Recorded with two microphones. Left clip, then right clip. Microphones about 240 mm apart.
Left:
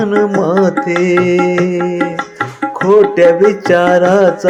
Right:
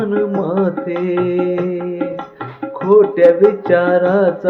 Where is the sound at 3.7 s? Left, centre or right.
Left.